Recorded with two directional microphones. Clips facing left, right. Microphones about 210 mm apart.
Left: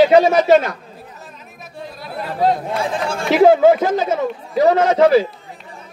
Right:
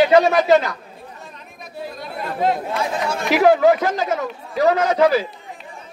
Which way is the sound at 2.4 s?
30° left (ahead or behind).